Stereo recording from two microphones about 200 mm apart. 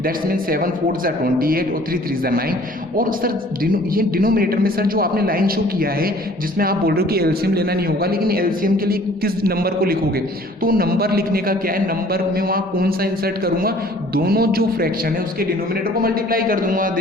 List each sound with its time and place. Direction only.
0.0 s a man's voice: 45° right (ahead or behind)